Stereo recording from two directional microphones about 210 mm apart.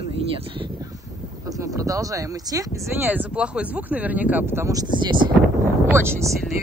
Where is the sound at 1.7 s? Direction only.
15° right (ahead or behind).